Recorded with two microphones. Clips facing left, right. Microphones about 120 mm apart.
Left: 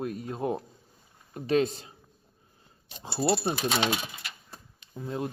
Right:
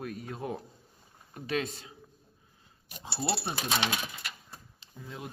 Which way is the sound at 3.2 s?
40° left (ahead or behind).